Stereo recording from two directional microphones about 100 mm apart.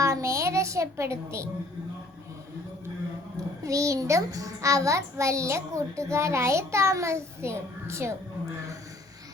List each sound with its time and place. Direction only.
0.0 s a child's voice: 30° right (ahead or behind)
3.6 s a child's voice: 35° right (ahead or behind)